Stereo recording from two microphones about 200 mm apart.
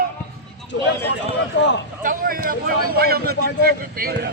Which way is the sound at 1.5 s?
60° left (ahead or behind).